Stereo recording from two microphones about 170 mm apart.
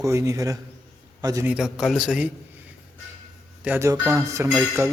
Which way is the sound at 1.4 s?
5° right (ahead or behind).